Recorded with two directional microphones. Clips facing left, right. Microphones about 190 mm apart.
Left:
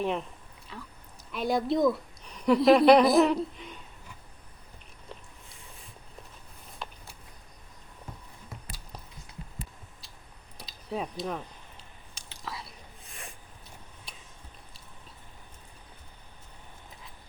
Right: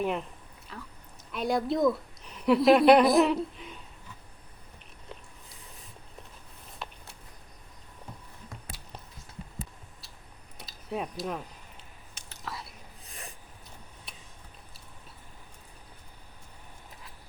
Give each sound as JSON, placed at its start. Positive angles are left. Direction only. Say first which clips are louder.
{"t": 0.0, "sound": "a woman's voice", "louder": "even", "side_deg": -5}
{"t": 6.8, "sound": "a sound", "louder": "even", "side_deg": 0}
{"t": 8.7, "sound": "a sound", "louder": "even", "side_deg": 0}
{"t": 10.6, "sound": "speech", "louder": "even", "side_deg": 0}
{"t": 12.1, "sound": "whispering", "louder": "even", "side_deg": 0}
{"t": 13.1, "sound": "snort", "louder": "right 1 dB", "side_deg": -35}